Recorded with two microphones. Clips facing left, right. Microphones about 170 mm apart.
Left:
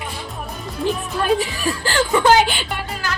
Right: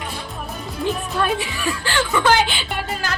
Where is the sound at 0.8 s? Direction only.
Centre (ahead or behind).